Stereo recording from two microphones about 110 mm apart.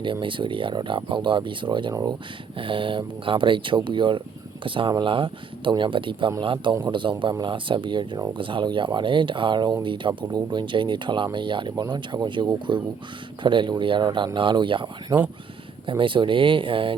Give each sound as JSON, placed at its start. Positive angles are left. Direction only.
{"t": 0.0, "sound": "speech", "side_deg": -50}
{"t": 1.9, "sound": "speech", "side_deg": -35}
{"t": 2.6, "sound": "speech", "side_deg": -55}